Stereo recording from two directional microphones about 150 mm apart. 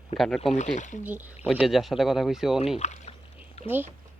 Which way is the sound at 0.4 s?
50° left (ahead or behind).